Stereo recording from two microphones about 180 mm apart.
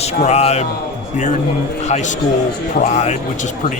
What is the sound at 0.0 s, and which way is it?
Speech, 35° left (ahead or behind).